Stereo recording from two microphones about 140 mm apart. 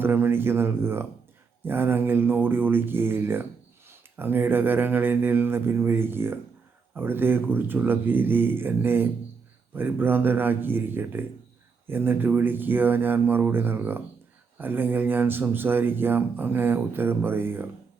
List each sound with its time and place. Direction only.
0.0 s speech: 15° right (ahead or behind)